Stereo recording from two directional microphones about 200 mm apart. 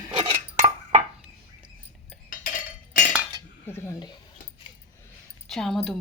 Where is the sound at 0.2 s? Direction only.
30° right (ahead or behind).